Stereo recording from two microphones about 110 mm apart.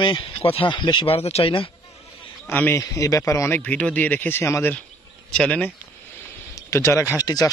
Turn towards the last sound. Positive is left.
turn(degrees=35)  # may be behind; listen again after turning